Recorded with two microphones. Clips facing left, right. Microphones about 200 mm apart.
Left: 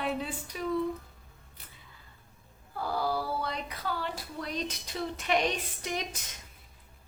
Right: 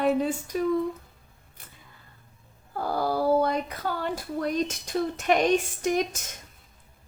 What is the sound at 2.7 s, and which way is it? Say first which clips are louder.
Speech: right 5 dB; 45° right (ahead or behind).